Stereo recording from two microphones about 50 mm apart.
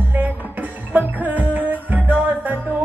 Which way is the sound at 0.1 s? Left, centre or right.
Right.